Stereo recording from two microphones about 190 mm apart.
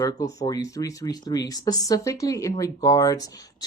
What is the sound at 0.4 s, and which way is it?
Speech, 20° left (ahead or behind).